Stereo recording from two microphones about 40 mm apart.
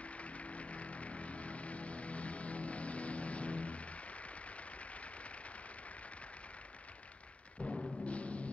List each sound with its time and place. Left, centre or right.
0.0 s a sound: left
7.6 s music: centre
8.1 s music: left